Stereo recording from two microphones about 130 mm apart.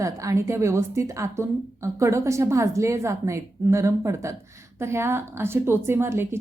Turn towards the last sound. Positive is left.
turn(degrees=-20)  # may be behind; listen again after turning